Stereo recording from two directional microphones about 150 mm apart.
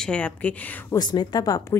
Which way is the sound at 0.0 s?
10° left (ahead or behind).